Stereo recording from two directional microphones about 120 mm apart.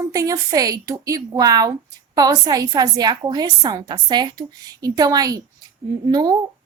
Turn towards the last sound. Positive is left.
turn(degrees=-35)  # may be behind; listen again after turning